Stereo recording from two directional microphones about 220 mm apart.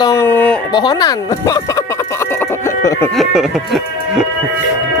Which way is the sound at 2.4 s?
10° left (ahead or behind).